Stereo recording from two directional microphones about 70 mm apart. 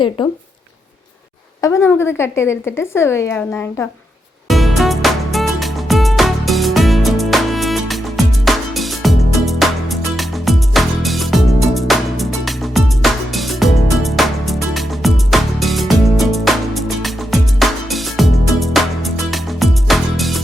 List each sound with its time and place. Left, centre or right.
1.8 s a woman's voice: left
3.3 s speech: left
4.4 s music: centre